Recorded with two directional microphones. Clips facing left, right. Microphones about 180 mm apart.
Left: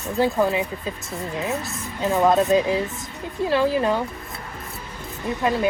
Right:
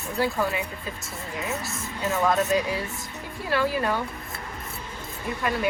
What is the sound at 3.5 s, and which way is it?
Speech, 20° left (ahead or behind).